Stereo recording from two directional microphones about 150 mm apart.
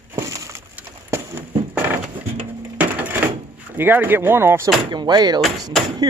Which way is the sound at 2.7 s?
10° right (ahead or behind).